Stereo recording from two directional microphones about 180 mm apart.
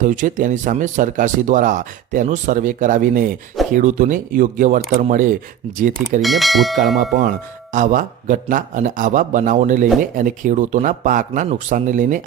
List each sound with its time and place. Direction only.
0.0 s speech: 45° right (ahead or behind)
6.2 s speech: centre (ahead or behind)
6.9 s speech: 60° right (ahead or behind); by 12.2 s 45° right (ahead or behind)